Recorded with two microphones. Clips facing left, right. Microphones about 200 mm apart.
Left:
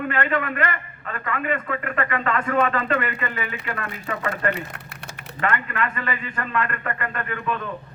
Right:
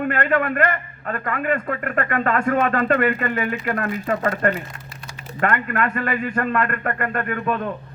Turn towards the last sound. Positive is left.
turn(degrees=-50)  # may be behind; listen again after turning